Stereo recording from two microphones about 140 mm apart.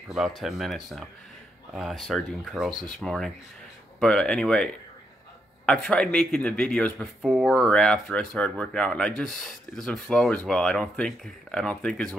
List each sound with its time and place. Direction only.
0.1 s speech: centre (ahead or behind)
5.7 s a man's voice: 5° left (ahead or behind)
7.2 s speech: 5° right (ahead or behind)